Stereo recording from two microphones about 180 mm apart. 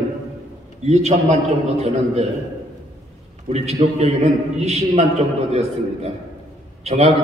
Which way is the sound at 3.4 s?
35° right (ahead or behind).